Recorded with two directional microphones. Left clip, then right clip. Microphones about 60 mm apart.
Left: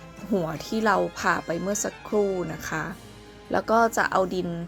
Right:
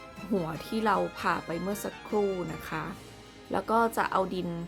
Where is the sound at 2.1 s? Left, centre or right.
Centre.